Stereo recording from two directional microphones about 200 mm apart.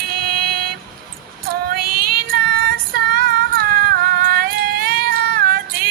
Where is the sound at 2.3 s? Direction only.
50° right (ahead or behind).